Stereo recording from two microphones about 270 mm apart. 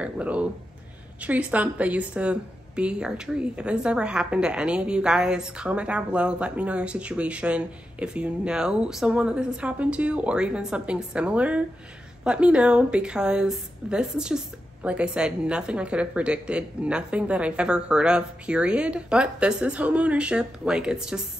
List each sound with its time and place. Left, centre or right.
0.0 s a woman's voice: centre